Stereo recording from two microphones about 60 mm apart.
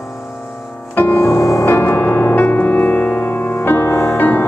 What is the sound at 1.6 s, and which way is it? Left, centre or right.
Music, left.